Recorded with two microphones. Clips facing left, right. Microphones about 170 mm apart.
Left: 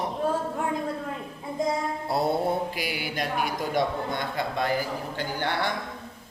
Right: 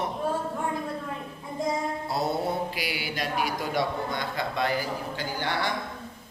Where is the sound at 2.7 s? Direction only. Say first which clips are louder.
Left 1 dB; 50° left (ahead or behind).